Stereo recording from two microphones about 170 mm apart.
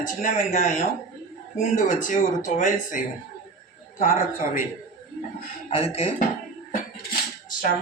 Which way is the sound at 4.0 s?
50° left (ahead or behind).